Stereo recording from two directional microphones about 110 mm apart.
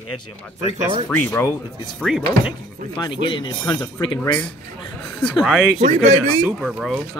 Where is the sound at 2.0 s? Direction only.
5° right (ahead or behind).